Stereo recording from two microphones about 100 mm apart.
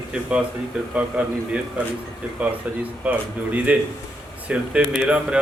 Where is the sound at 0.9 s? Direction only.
15° right (ahead or behind).